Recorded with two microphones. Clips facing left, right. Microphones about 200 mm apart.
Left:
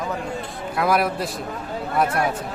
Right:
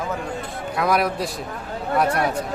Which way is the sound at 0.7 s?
Centre (ahead or behind).